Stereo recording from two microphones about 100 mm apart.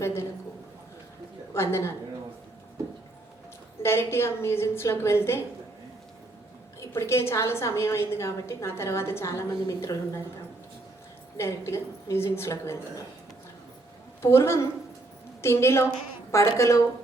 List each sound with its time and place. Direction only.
0.0 s a man's voice: 25° left (ahead or behind)
1.5 s a woman's voice: 25° left (ahead or behind)
3.8 s a woman's voice: 25° left (ahead or behind)
6.7 s a woman's voice: 30° left (ahead or behind)
11.3 s a woman's voice: 30° left (ahead or behind)
14.2 s a woman's voice: 25° left (ahead or behind)